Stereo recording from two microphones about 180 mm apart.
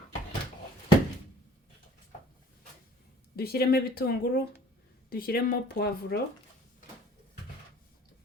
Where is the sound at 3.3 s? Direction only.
60° left (ahead or behind).